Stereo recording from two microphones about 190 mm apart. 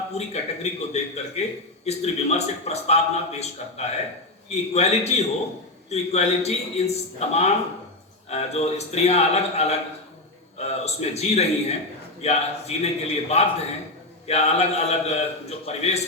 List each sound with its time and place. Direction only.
0.1 s a man's voice: 35° left (ahead or behind)